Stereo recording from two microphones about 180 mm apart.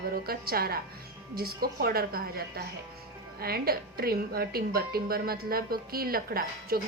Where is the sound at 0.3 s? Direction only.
55° right (ahead or behind).